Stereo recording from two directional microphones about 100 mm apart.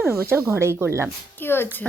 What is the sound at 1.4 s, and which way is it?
Speech, 25° left (ahead or behind).